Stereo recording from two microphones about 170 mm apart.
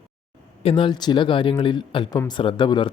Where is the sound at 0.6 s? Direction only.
30° left (ahead or behind).